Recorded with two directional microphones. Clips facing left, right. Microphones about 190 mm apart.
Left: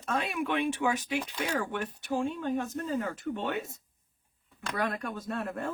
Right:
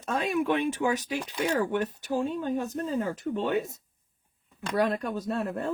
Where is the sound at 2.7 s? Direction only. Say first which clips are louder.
Right 3 dB; 30° right (ahead or behind).